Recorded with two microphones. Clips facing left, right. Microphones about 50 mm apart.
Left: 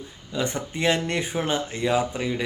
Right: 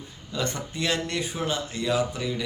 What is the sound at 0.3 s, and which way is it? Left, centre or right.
Speech, centre.